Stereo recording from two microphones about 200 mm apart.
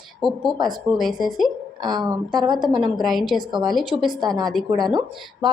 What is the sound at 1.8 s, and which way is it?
Speech, 20° right (ahead or behind).